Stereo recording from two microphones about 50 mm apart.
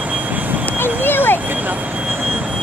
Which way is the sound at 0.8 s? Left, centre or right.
Left.